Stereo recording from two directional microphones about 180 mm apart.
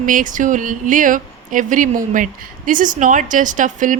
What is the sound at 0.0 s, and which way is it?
Speech, 45° right (ahead or behind).